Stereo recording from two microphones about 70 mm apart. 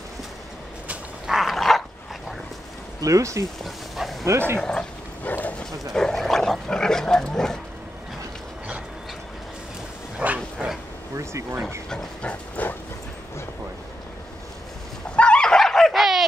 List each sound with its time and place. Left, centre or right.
1.2 s dog: centre
3.0 s speech: right
3.6 s dog: centre
4.3 s speech: right
4.6 s dog: centre
5.2 s dog: left
5.9 s dog: centre
10.1 s bow-wow: centre
11.1 s speech: right
11.9 s dog: centre
15.1 s dog: centre